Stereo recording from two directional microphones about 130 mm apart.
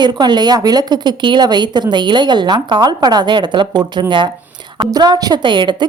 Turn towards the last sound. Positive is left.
turn(degrees=-35)  # may be behind; listen again after turning